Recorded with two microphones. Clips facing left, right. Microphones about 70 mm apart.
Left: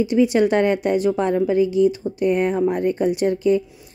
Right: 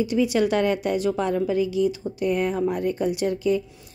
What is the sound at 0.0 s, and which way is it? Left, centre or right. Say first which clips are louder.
Speech: left 5 dB; left.